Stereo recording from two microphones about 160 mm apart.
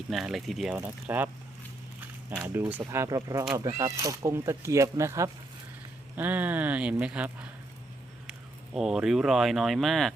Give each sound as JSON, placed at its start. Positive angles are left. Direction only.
{"t": 0.1, "sound": "speech", "side_deg": 0}
{"t": 0.9, "sound": "speech", "side_deg": -10}
{"t": 2.3, "sound": "speech", "side_deg": -20}
{"t": 8.7, "sound": "speech", "side_deg": -5}